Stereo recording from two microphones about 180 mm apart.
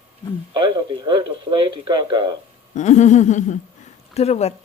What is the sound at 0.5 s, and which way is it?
Speech, 25° right (ahead or behind).